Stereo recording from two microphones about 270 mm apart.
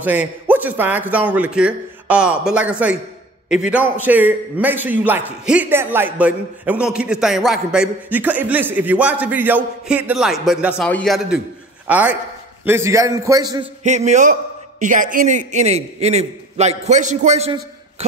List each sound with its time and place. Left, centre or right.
0.0 s a man's voice: centre
13.8 s a man's voice: right